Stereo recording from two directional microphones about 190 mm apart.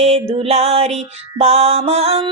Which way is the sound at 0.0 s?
35° right (ahead or behind).